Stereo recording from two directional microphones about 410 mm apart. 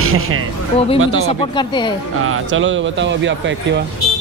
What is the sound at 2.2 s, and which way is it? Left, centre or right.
Speech, right.